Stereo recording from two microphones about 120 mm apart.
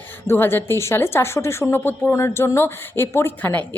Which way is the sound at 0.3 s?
20° left (ahead or behind).